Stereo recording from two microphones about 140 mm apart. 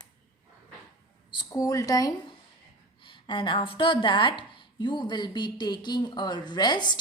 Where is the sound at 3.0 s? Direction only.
35° left (ahead or behind).